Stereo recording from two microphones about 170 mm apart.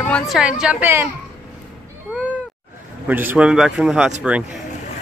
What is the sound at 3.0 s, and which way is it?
A man's voice, 10° right (ahead or behind).